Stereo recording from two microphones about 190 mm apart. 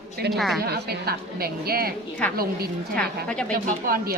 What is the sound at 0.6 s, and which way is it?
A woman's voice, 55° right (ahead or behind).